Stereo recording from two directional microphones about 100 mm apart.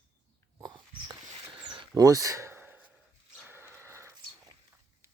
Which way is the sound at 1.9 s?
35° right (ahead or behind).